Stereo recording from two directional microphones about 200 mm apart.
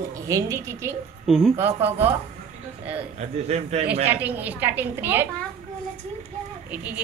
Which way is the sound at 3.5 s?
30° right (ahead or behind).